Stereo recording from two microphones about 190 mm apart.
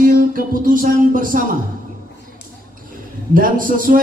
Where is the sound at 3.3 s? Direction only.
45° right (ahead or behind).